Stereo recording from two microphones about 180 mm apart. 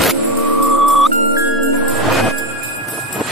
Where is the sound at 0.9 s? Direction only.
Centre (ahead or behind).